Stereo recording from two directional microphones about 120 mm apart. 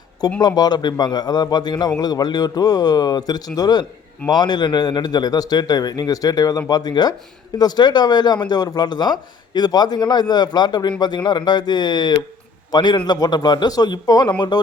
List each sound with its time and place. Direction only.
0.3 s speech: 35° left (ahead or behind)